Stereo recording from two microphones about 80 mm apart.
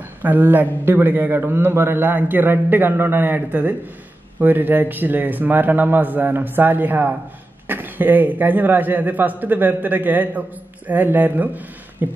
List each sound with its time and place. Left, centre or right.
0.2 s a man's voice: right